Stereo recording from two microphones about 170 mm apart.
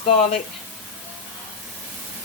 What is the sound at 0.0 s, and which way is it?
Speech, 35° left (ahead or behind).